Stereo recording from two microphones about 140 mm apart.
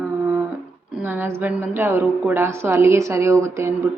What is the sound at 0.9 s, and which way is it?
A woman's voice, 15° right (ahead or behind).